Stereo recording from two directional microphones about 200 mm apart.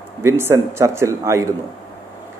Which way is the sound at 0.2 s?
15° right (ahead or behind).